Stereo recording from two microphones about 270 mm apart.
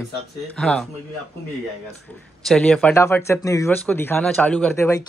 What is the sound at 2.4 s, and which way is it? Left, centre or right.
Speech, centre.